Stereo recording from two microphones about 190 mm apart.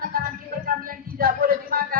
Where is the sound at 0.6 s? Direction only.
50° right (ahead or behind).